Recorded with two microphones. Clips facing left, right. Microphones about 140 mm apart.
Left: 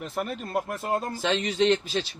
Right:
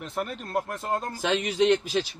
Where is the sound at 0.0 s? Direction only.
Centre (ahead or behind).